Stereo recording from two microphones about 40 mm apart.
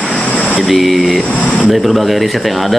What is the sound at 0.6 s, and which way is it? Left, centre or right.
Speech, centre.